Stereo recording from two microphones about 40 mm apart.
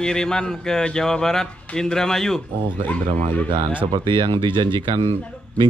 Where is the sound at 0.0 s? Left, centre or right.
Centre.